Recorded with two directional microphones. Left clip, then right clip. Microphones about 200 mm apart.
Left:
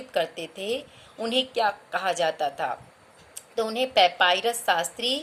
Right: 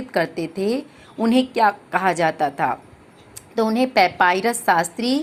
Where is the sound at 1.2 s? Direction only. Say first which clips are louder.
Right 7 dB; 10° right (ahead or behind).